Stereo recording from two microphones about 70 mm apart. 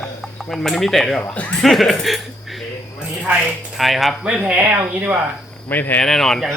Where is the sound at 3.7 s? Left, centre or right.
Centre.